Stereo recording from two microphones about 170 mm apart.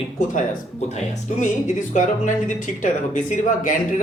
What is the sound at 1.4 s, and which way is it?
Speech, 45° left (ahead or behind).